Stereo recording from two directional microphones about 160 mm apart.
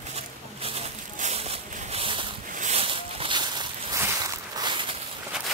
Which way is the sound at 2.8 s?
35° right (ahead or behind).